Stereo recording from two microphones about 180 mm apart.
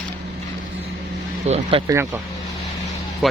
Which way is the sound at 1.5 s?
35° right (ahead or behind).